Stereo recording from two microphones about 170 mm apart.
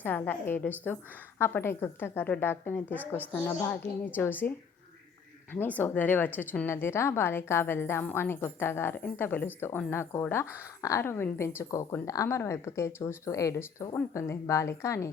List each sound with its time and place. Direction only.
0.0 s a woman's voice: 10° left (ahead or behind)
5.5 s a woman's voice: 10° left (ahead or behind)